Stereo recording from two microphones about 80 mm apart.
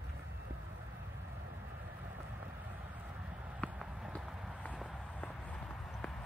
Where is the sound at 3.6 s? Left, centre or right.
Centre.